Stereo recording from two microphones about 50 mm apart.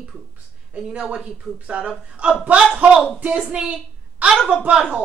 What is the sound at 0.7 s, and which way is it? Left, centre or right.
A woman's voice, centre.